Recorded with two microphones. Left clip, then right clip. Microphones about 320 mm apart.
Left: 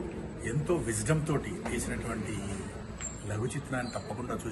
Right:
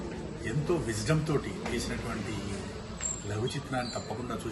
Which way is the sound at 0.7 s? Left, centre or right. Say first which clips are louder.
Even; centre.